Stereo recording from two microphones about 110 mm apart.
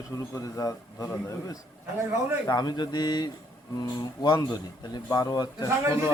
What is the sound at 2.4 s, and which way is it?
Speech, 40° left (ahead or behind).